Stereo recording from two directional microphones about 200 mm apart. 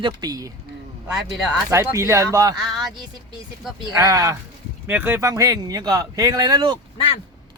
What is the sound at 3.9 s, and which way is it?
Speech, 15° right (ahead or behind).